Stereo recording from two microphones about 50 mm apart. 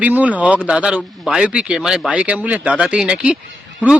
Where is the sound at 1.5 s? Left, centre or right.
Right.